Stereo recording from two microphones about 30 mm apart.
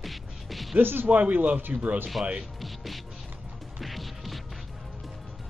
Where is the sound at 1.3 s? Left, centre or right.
Right.